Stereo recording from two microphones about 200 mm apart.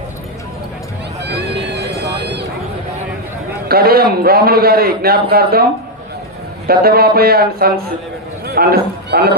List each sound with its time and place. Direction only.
1.2 s a sound: 60° right (ahead or behind)
3.7 s a man's voice: 50° right (ahead or behind)
6.7 s a man's voice: 50° right (ahead or behind)